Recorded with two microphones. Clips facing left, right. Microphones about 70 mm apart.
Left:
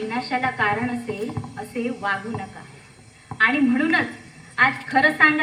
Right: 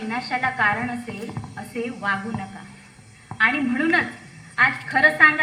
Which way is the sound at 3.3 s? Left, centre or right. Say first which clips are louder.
Left 1 dB; centre.